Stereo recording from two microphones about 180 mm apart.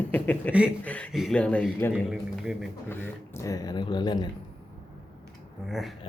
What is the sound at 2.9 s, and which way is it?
Speech, 15° left (ahead or behind).